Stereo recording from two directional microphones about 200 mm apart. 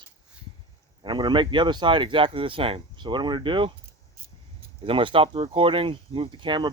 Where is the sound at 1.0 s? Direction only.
25° right (ahead or behind).